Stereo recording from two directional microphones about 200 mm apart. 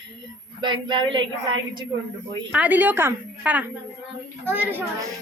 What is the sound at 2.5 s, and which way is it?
A woman's voice, 5° right (ahead or behind).